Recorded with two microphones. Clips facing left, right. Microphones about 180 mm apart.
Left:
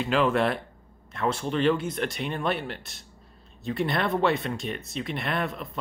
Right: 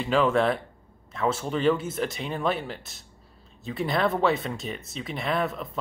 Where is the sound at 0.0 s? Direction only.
Centre (ahead or behind).